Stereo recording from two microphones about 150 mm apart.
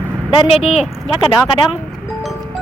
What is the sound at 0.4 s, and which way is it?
Speech, 45° left (ahead or behind).